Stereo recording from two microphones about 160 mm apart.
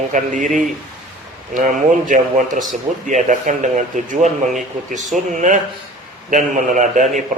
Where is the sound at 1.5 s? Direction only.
55° right (ahead or behind).